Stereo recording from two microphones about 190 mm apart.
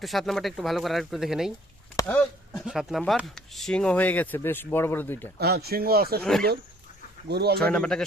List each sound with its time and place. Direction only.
0.0 s speech: centre (ahead or behind)
5.4 s speech: 55° right (ahead or behind)
7.3 s speech: 60° right (ahead or behind)
7.6 s speech: 5° left (ahead or behind)